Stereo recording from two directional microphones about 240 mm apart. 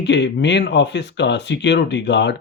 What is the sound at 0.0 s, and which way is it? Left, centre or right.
A man's voice, left.